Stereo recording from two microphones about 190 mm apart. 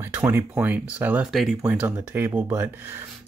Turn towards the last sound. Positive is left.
turn(degrees=-10)  # may be behind; listen again after turning